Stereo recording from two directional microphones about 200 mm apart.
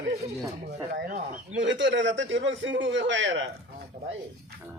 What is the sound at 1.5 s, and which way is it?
A man's voice, 65° right (ahead or behind).